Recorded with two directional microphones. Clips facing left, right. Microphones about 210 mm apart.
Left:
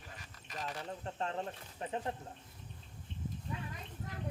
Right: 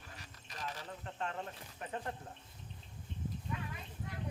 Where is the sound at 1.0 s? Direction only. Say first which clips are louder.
Left 2 dB; 35° left (ahead or behind).